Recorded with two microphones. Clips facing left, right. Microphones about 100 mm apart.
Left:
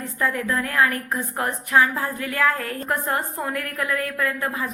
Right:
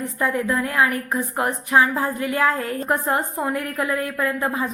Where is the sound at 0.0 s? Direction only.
15° right (ahead or behind).